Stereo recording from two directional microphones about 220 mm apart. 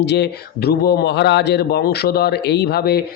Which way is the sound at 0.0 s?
50° left (ahead or behind).